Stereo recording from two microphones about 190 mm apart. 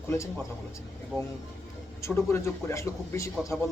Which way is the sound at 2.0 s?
15° left (ahead or behind).